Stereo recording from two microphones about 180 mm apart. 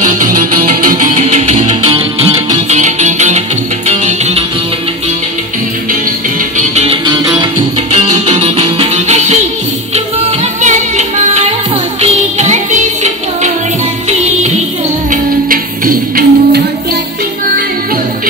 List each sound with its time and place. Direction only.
0.0 s music: 45° right (ahead or behind)
1.1 s music: 40° right (ahead or behind)
6.7 s music: 35° right (ahead or behind)
7.1 s music: 20° right (ahead or behind)
7.9 s music: 35° right (ahead or behind)
15.0 s music: 50° right (ahead or behind)